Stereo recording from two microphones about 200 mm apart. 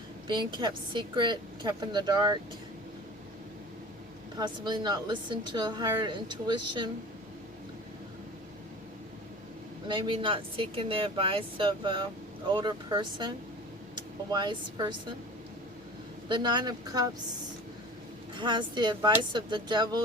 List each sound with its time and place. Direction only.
0.3 s speech: 20° right (ahead or behind)
4.4 s speech: 20° right (ahead or behind)
9.9 s speech: 25° right (ahead or behind)
16.3 s speech: 20° right (ahead or behind)
18.3 s speech: 20° right (ahead or behind)